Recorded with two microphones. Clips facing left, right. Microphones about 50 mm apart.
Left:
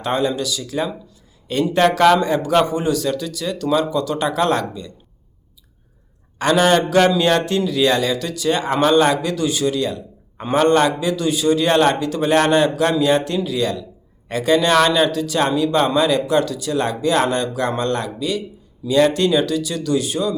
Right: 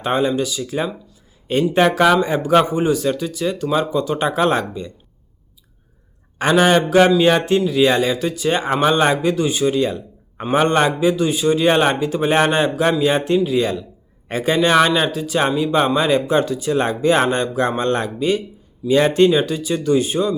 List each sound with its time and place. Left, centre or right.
0.0 s speech: centre
6.4 s speech: centre